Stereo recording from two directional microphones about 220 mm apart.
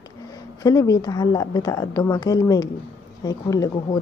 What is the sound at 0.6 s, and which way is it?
A woman's voice, 15° left (ahead or behind).